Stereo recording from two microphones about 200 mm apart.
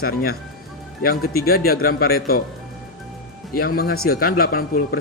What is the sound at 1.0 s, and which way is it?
Speech, 50° left (ahead or behind).